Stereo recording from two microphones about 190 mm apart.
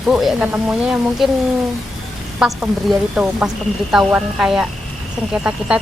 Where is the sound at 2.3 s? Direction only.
5° right (ahead or behind).